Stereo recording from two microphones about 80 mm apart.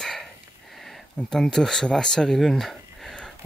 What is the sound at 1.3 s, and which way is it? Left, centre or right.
Speech, centre.